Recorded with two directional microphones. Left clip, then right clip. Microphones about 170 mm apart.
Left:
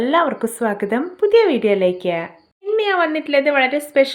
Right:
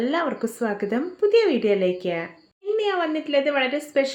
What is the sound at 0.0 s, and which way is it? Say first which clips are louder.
Speech: left 7 dB; 25° left (ahead or behind).